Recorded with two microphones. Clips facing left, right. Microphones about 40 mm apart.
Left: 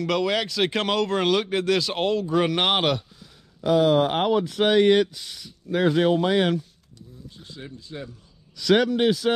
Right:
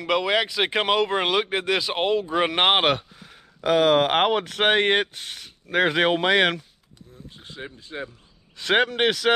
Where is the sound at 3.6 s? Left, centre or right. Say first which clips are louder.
Right 1 dB; right.